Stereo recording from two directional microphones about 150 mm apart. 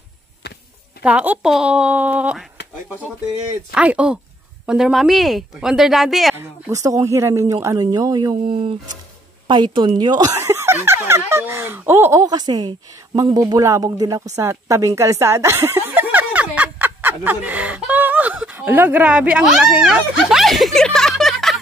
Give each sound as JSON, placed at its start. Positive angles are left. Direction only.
{"t": 1.0, "sound": "speech", "side_deg": -10}
{"t": 3.7, "sound": "speech", "side_deg": -5}
{"t": 6.3, "sound": "speech", "side_deg": -20}
{"t": 14.3, "sound": "chuckle", "side_deg": -20}